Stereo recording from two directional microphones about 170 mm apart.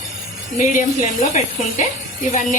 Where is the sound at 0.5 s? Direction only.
50° left (ahead or behind).